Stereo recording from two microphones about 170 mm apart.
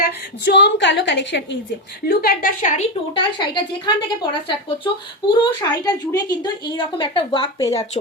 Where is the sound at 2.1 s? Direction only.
60° left (ahead or behind).